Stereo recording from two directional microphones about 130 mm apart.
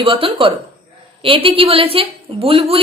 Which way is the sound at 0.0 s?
45° right (ahead or behind).